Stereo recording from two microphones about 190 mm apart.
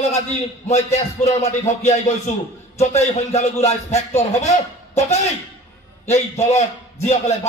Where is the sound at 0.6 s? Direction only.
35° left (ahead or behind).